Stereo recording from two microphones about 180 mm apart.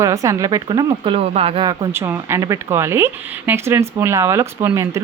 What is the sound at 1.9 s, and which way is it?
Speech, 15° right (ahead or behind).